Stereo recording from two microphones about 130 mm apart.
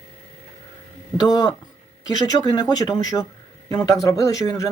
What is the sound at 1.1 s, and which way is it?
Speech, 30° left (ahead or behind).